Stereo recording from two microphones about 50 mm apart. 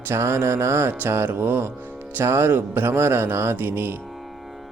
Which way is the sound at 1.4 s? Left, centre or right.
Right.